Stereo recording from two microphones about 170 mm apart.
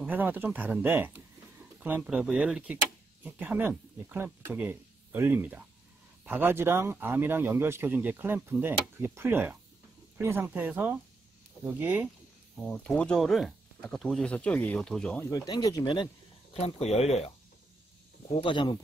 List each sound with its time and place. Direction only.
0.0 s speech: 10° right (ahead or behind)
12.5 s speech: 5° left (ahead or behind); by 16.1 s 25° left (ahead or behind)
16.8 s speech: 40° left (ahead or behind)
18.4 s speech: 30° left (ahead or behind)